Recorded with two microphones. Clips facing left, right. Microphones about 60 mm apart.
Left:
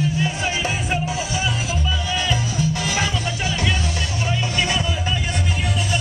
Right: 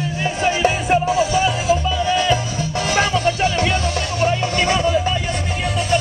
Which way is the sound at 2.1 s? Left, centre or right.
Right.